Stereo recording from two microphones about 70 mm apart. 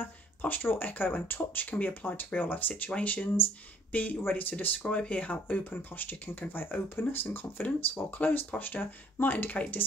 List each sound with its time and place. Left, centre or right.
0.0 s speech: left